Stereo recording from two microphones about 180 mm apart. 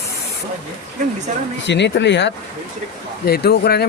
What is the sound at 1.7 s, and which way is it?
Speech, 75° left (ahead or behind).